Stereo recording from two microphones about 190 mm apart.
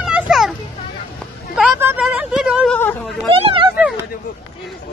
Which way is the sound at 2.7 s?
10° left (ahead or behind).